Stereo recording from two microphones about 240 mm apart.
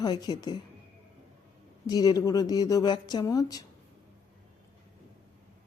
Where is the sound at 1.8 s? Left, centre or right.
Centre.